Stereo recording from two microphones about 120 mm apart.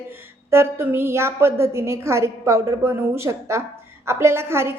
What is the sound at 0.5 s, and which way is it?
A woman's voice, 20° right (ahead or behind).